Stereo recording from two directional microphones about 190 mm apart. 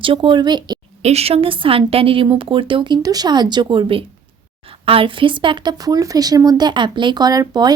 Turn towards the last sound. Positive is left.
turn(degrees=-20)  # may be behind; listen again after turning